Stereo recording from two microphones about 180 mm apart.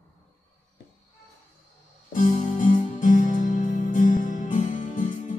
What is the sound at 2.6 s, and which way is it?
Music, 45° left (ahead or behind).